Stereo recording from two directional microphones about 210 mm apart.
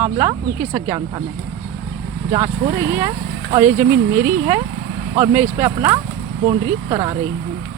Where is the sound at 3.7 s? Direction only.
40° right (ahead or behind).